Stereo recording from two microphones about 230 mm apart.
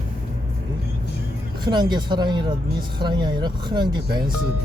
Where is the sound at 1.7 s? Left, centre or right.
Centre.